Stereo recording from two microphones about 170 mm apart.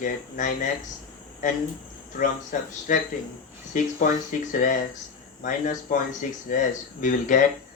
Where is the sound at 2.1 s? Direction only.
50° left (ahead or behind).